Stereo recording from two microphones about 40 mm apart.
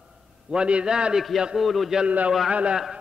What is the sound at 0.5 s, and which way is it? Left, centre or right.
Speech, right.